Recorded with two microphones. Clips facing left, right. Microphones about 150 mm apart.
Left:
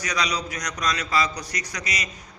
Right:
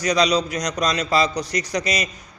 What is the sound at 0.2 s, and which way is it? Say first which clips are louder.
A man's voice: right 6 dB; 25° right (ahead or behind).